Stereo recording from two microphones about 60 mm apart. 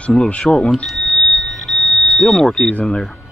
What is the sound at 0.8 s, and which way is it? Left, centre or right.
Smoke detector, centre.